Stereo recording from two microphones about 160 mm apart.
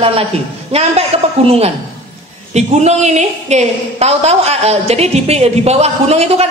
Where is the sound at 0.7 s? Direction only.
40° right (ahead or behind).